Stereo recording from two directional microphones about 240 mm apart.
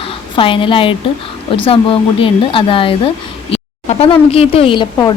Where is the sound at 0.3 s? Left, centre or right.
Left.